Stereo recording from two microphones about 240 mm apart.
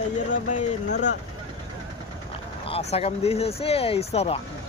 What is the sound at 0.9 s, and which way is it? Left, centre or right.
Speech, left.